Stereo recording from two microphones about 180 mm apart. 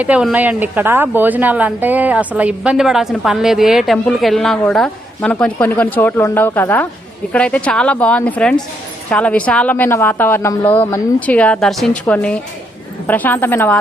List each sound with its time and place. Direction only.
0.0 s a woman's voice: 5° right (ahead or behind); by 13.7 s 10° left (ahead or behind)